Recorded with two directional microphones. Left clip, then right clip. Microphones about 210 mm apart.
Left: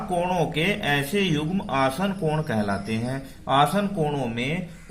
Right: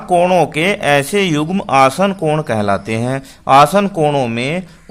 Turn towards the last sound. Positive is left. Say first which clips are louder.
# right 11 dB
turn(degrees=-40)  # may be behind; listen again after turning